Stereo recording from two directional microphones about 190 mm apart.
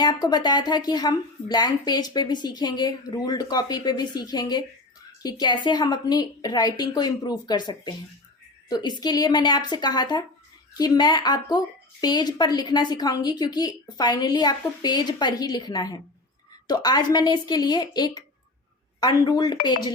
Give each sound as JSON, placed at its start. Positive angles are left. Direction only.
{"t": 0.0, "sound": "speech", "side_deg": 20}